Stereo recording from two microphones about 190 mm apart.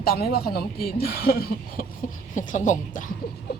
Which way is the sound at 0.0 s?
55° left (ahead or behind).